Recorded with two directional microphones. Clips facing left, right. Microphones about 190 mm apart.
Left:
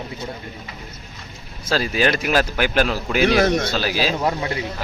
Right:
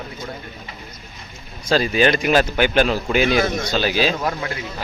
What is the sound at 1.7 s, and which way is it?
Speech, 5° left (ahead or behind).